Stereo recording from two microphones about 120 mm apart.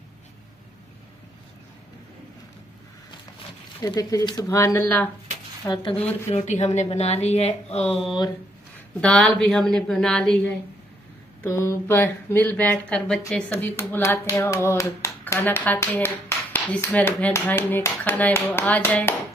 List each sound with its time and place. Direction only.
3.8 s speech: 30° left (ahead or behind)
4.6 s speech: 20° left (ahead or behind)
5.7 s speech: 40° left (ahead or behind)
5.9 s speech: 10° left (ahead or behind)
6.3 s a woman's voice: 70° left (ahead or behind)
9.0 s speech: 5° left (ahead or behind)
11.4 s speech: 20° left (ahead or behind)